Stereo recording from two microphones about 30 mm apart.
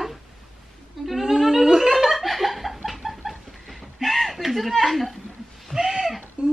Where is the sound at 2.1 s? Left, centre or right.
Centre.